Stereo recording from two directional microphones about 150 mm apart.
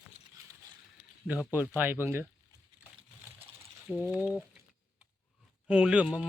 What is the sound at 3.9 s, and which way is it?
Speech, 5° right (ahead or behind).